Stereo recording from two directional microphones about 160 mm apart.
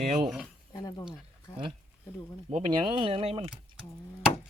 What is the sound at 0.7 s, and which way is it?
Speech, 25° left (ahead or behind).